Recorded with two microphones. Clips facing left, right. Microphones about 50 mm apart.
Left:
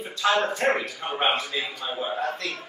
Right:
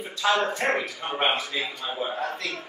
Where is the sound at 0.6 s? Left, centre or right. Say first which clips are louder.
Left 2 dB; centre.